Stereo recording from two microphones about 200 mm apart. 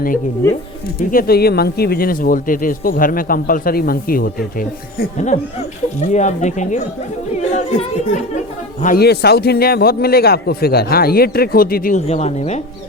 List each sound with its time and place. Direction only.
0.9 s speech: 50° left (ahead or behind)
8.8 s speech: 45° left (ahead or behind)